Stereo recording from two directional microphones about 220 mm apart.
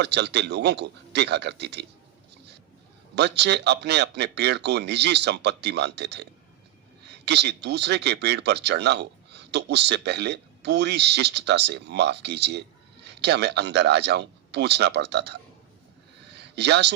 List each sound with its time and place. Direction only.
0.0 s speech: 50° right (ahead or behind)
3.2 s speech: 50° right (ahead or behind)
16.3 s a sound: 50° right (ahead or behind)